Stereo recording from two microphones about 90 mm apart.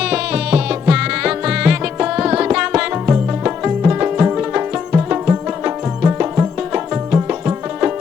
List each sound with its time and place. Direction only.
0.0 s music: 10° right (ahead or behind)